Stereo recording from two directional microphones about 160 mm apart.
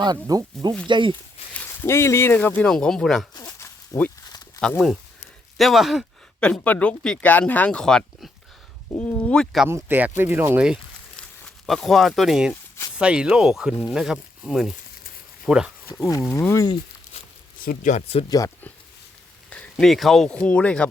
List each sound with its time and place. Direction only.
0.0 s speech: 25° right (ahead or behind)
1.5 s speech: 15° left (ahead or behind)
3.3 s a sound: 25° left (ahead or behind)
3.9 s speech: 20° left (ahead or behind)
5.5 s speech: centre (ahead or behind)
9.6 s speech: 15° right (ahead or behind)
11.2 s speech: 5° left (ahead or behind)
16.3 s speech: 15° left (ahead or behind)
17.7 s speech: 50° left (ahead or behind)
18.3 s speech: 20° left (ahead or behind)
19.5 s speech: 5° left (ahead or behind)